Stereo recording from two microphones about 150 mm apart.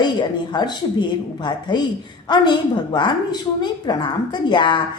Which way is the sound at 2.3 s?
30° left (ahead or behind).